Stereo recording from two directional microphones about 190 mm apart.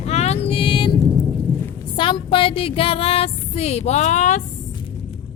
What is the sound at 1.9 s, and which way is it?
Speech, 25° left (ahead or behind).